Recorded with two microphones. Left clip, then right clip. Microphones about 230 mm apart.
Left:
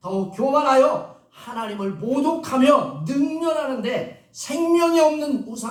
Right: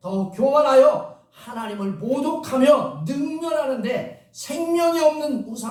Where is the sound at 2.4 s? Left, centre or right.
Centre.